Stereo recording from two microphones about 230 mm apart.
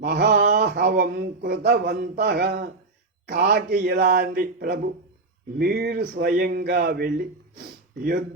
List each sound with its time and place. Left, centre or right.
0.0 s speech: right